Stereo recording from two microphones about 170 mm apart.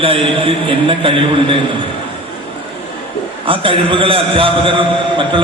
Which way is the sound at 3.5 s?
30° right (ahead or behind).